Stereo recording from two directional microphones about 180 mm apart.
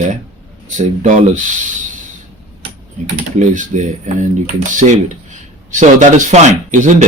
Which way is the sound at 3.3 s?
40° right (ahead or behind).